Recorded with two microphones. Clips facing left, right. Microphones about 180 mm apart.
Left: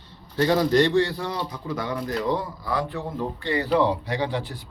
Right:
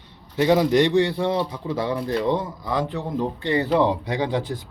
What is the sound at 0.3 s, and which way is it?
A man's voice, 15° right (ahead or behind).